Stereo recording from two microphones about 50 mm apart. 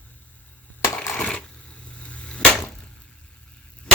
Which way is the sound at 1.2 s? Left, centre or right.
Left.